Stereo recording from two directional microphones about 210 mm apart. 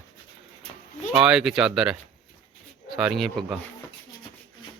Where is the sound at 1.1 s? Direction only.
5° right (ahead or behind).